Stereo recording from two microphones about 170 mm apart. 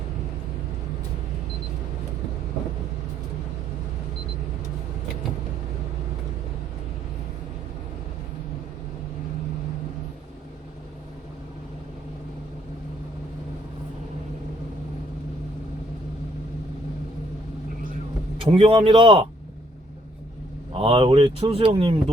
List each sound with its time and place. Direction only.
18.3 s speech: 30° right (ahead or behind)
20.7 s speech: 30° right (ahead or behind)